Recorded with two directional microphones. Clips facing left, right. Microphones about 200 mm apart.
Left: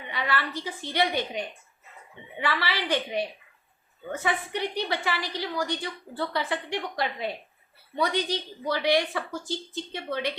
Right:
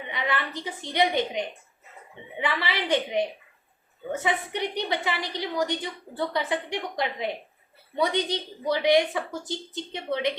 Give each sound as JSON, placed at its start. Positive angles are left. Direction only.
{"t": 0.1, "sound": "a woman's voice", "side_deg": -20}